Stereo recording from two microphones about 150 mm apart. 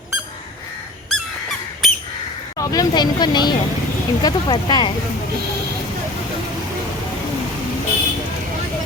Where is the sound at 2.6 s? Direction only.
25° left (ahead or behind).